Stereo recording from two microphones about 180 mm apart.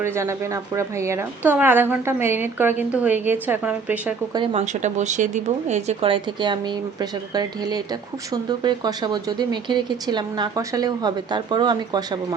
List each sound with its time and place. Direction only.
0.0 s a woman's voice: 15° right (ahead or behind)
4.6 s speech: 40° right (ahead or behind); by 12.0 s 25° right (ahead or behind)